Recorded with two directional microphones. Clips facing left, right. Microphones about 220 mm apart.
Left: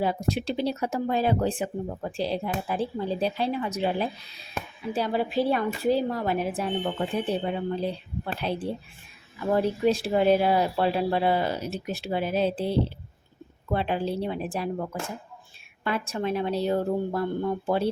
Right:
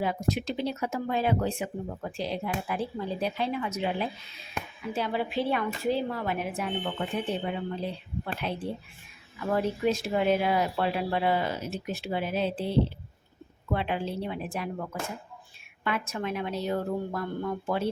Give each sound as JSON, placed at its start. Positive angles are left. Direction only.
{"t": 0.0, "sound": "speech", "side_deg": 30}